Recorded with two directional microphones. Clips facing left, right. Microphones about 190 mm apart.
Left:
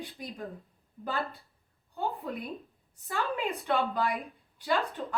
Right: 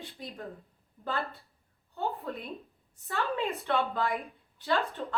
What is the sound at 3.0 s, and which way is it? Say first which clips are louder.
Speech: even; 15° left (ahead or behind).